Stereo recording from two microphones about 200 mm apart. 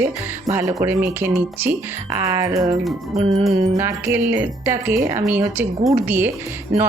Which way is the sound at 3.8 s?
10° right (ahead or behind).